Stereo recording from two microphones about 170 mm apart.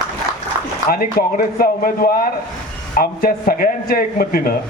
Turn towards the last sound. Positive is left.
turn(degrees=60)  # may be behind; listen again after turning